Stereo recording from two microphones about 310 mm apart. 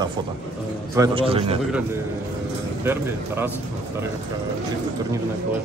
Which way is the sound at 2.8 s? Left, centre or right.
Centre.